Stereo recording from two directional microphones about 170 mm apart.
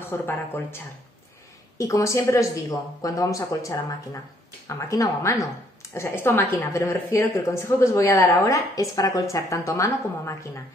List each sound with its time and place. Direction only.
0.0 s a woman's voice: 10° left (ahead or behind)